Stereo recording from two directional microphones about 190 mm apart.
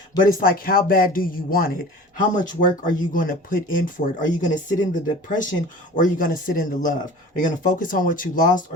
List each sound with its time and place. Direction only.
0.2 s speech: 45° left (ahead or behind)